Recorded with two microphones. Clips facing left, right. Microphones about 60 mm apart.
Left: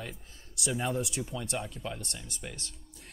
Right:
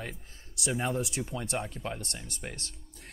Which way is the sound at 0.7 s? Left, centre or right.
Centre.